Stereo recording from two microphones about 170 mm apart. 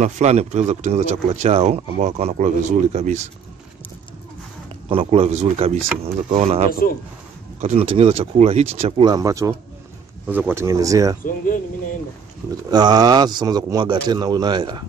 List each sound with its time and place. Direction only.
0.0 s speech: 40° right (ahead or behind)
4.8 s speech: 35° right (ahead or behind)
9.0 s speech: 20° right (ahead or behind)
11.2 s speech: 55° left (ahead or behind)
12.7 s speech: 25° right (ahead or behind)